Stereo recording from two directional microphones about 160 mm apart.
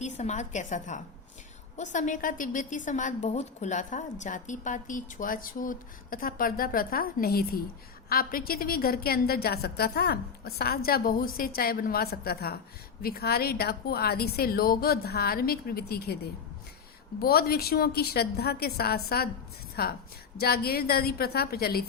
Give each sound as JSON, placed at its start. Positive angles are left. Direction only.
{"t": 0.0, "sound": "a woman's voice", "side_deg": 45}
{"t": 17.2, "sound": "a woman's voice", "side_deg": 75}